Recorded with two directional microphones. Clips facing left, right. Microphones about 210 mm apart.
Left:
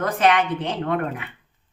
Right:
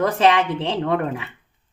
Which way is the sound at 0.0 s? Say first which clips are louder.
Right 2 dB; 25° right (ahead or behind).